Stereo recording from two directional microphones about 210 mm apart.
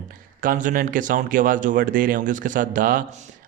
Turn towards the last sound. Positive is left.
turn(degrees=-35)  # may be behind; listen again after turning